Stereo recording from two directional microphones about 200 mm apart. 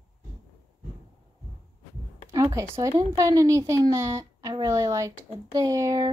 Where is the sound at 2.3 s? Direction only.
15° right (ahead or behind).